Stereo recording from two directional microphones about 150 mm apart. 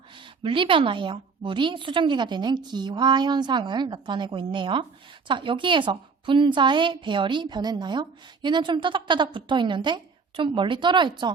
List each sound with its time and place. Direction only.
0.4 s a woman's voice: 35° right (ahead or behind)